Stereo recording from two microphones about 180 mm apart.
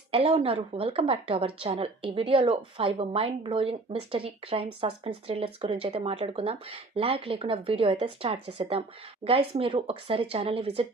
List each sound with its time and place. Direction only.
0.1 s a woman's voice: 30° right (ahead or behind)